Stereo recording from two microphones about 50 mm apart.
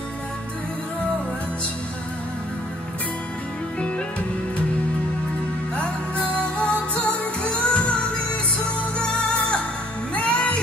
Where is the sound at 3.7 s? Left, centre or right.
Left.